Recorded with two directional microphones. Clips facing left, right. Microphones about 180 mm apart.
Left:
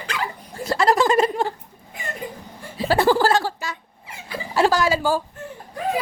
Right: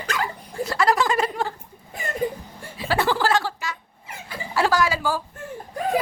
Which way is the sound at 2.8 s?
35° left (ahead or behind).